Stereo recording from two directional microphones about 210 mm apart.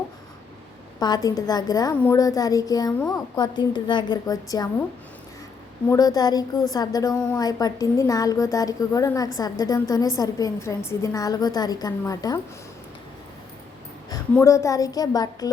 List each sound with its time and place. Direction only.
0.9 s a woman's voice: 20° left (ahead or behind)
5.9 s a woman's voice: 20° left (ahead or behind)
14.4 s a woman's voice: 15° left (ahead or behind)